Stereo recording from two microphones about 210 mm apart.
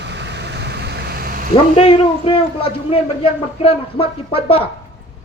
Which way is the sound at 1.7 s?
25° left (ahead or behind).